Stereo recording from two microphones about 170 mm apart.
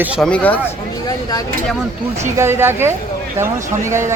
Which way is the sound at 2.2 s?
15° right (ahead or behind).